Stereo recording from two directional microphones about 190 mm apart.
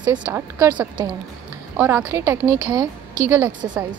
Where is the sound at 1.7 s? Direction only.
15° right (ahead or behind).